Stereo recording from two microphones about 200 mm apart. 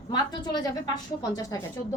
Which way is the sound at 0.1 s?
20° left (ahead or behind).